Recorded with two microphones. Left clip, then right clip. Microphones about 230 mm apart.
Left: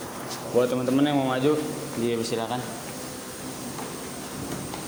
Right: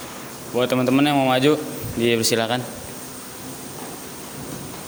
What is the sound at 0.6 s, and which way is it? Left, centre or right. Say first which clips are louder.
A man's voice: right 5 dB; right.